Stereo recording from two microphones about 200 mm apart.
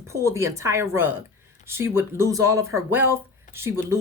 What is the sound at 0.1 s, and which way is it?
Speech, 15° right (ahead or behind).